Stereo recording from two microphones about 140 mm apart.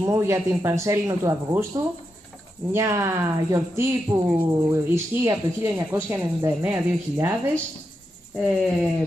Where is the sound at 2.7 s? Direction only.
20° right (ahead or behind).